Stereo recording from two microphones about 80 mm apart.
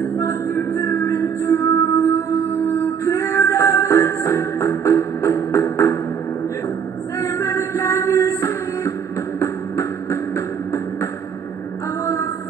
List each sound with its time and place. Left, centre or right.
0.0 s music: left
7.2 s music: left
12.0 s a sound: left